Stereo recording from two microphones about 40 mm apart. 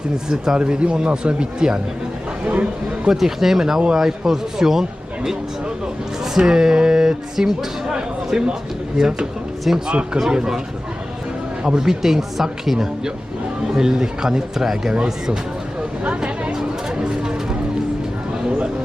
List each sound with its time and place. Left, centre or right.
0.3 s speech: centre
0.6 s speech: right
3.1 s speech: centre
11.6 s speech: centre
14.9 s speech: right
16.0 s a sound: right